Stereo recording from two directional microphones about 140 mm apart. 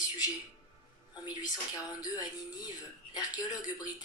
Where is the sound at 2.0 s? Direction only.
25° left (ahead or behind).